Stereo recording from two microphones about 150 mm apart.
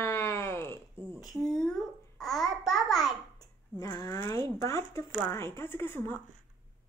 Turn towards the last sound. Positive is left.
turn(degrees=15)  # may be behind; listen again after turning